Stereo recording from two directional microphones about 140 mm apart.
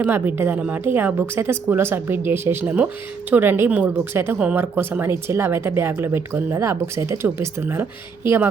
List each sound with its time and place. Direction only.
0.0 s a woman's voice: 15° right (ahead or behind)